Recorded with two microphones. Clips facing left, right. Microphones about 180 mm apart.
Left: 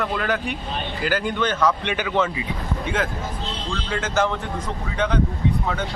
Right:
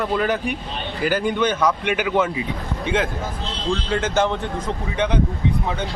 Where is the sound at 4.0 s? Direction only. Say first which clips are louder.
Right 2 dB; 25° right (ahead or behind).